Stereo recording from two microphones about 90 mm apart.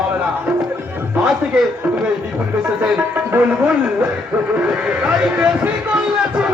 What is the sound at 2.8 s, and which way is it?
A man's voice, 15° right (ahead or behind).